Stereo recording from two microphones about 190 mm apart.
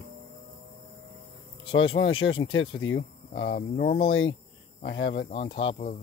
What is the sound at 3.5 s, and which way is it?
Speech, 45° left (ahead or behind).